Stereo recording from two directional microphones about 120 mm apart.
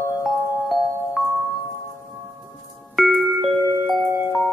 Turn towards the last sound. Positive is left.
turn(degrees=0)  # may be behind; listen again after turning